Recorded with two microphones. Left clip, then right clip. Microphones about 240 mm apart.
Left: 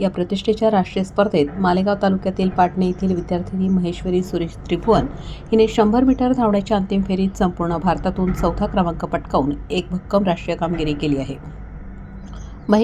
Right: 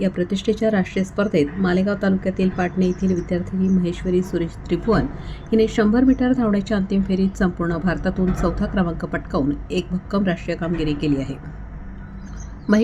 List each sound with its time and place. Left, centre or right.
0.0 s a woman's voice: centre